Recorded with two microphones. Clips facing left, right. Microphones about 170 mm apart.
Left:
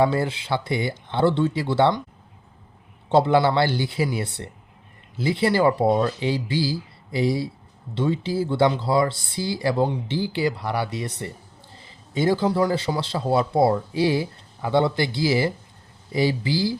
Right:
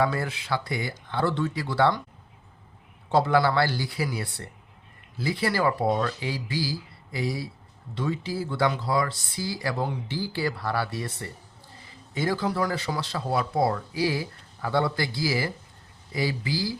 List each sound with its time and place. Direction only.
0.0 s speech: 25° left (ahead or behind)
3.1 s speech: 25° left (ahead or behind)